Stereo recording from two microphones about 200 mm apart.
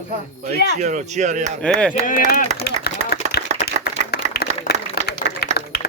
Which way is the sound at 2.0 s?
40° left (ahead or behind).